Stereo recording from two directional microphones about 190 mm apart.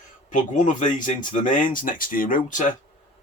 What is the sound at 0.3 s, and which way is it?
Speech, 40° left (ahead or behind).